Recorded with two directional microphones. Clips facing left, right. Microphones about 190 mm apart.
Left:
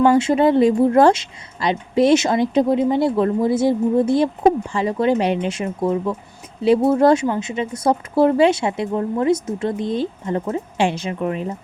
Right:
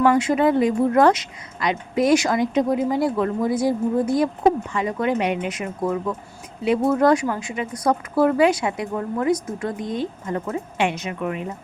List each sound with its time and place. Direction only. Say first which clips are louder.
0.0 s speech: left 3 dB; 25° left (ahead or behind)